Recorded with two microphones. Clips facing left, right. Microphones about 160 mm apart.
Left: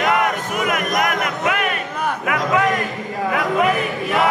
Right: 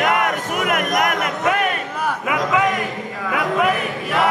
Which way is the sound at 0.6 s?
55° right (ahead or behind).